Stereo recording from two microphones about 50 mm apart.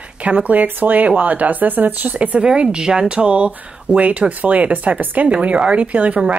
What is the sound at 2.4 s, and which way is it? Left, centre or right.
Speech, centre.